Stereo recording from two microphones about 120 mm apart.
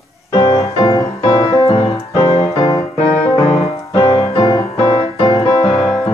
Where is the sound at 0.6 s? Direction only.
60° left (ahead or behind).